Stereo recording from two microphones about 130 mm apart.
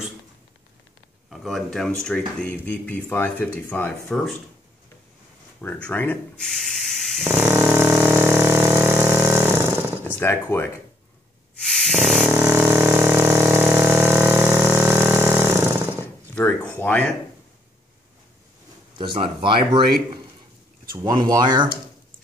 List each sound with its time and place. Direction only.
1.3 s speech: centre (ahead or behind); by 4.1 s 15° left (ahead or behind)
4.1 s speech: 5° left (ahead or behind)
5.6 s speech: 10° left (ahead or behind)
7.2 s a sound: 15° right (ahead or behind)
10.1 s speech: 15° left (ahead or behind)
11.6 s a sound: centre (ahead or behind); by 16.1 s 15° right (ahead or behind)
16.3 s a sound: 10° left (ahead or behind)
16.8 s speech: 10° left (ahead or behind)
18.9 s speech: 40° right (ahead or behind)
21.3 s speech: 35° right (ahead or behind)